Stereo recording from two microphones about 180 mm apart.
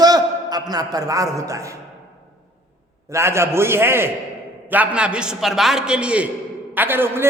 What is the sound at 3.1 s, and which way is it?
A man's voice, 15° right (ahead or behind).